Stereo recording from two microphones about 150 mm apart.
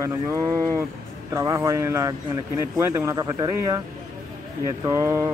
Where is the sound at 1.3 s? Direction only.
20° right (ahead or behind).